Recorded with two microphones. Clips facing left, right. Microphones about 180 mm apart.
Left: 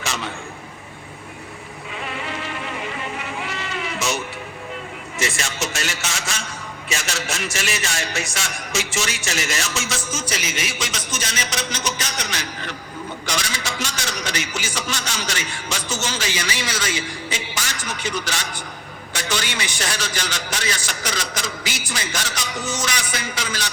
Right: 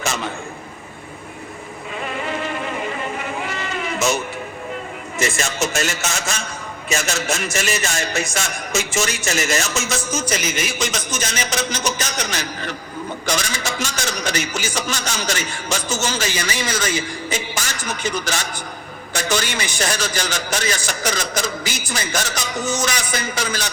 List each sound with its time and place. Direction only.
2.0 s music: 45° right (ahead or behind)
5.2 s a man's voice: 45° right (ahead or behind)